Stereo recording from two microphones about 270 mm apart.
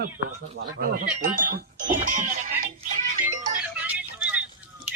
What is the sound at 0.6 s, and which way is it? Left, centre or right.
Speech, right.